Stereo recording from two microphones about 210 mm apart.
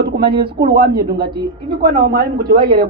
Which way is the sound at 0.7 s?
45° right (ahead or behind).